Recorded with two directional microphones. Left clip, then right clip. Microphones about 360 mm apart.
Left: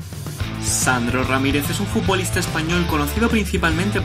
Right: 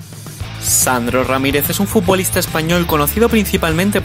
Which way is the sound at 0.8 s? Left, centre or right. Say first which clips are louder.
Right 4 dB; right.